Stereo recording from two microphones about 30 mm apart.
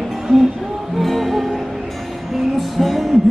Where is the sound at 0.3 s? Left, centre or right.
Left.